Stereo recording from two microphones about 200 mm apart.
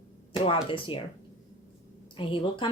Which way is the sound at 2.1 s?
25° left (ahead or behind).